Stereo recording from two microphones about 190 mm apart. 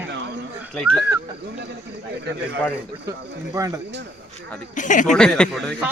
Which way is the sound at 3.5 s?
15° right (ahead or behind).